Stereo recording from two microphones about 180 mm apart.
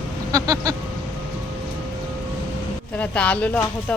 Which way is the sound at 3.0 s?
10° left (ahead or behind).